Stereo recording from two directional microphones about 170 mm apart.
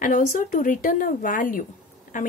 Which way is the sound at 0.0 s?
50° left (ahead or behind).